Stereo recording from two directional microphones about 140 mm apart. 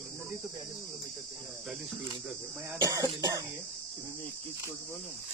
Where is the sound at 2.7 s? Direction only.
25° right (ahead or behind).